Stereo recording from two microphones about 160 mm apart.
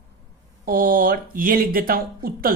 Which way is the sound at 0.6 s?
65° right (ahead or behind).